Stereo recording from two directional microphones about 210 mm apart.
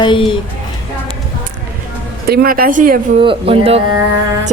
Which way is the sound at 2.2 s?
45° right (ahead or behind).